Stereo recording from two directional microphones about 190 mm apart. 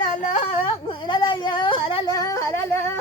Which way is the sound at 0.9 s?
25° left (ahead or behind).